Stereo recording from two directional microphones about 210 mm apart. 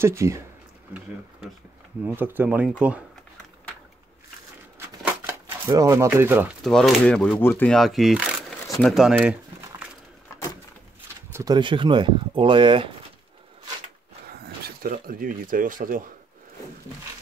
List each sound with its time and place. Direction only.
0.0 s speech: 15° right (ahead or behind)
2.0 s speech: 10° right (ahead or behind)
4.7 s a sound: 15° right (ahead or behind)
6.7 s speech: 5° left (ahead or behind)
8.7 s crumpling: centre (ahead or behind)
11.3 s speech: 20° right (ahead or behind)
14.2 s speech: 50° right (ahead or behind)